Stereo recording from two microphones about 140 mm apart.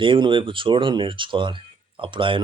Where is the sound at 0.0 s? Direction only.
35° right (ahead or behind).